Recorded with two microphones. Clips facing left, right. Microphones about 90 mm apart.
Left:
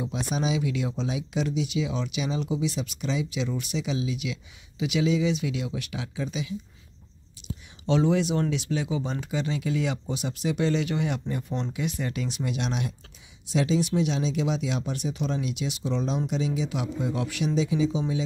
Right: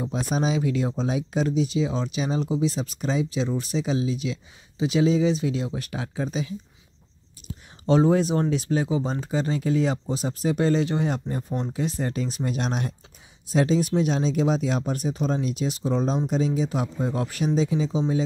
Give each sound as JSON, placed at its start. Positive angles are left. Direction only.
{"t": 0.0, "sound": "speech", "side_deg": -40}